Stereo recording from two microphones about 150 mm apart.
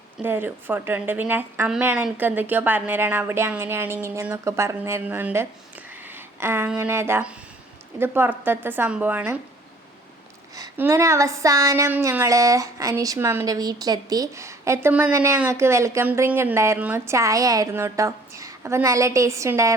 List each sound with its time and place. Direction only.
0.2 s speech: 15° right (ahead or behind)
10.8 s speech: 20° right (ahead or behind)